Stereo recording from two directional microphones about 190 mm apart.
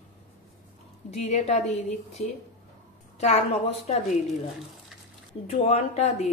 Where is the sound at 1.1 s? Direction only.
35° left (ahead or behind).